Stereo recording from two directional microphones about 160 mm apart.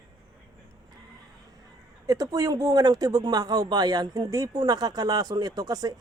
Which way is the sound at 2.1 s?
20° right (ahead or behind).